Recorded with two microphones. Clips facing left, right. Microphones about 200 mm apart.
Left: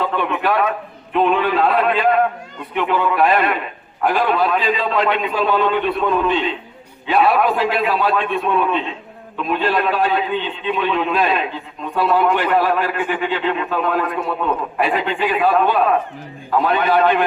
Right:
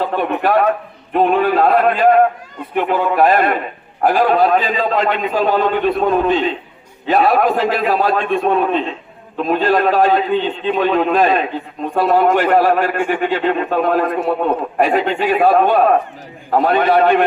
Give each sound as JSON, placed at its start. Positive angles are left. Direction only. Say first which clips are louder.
{"t": 0.2, "sound": "a man's voice", "louder": "right 5 dB", "side_deg": -40}